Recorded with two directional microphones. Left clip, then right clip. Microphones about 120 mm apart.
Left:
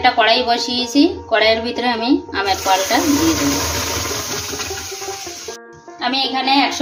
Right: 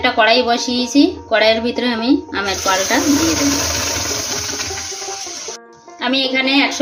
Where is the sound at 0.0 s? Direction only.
90° right.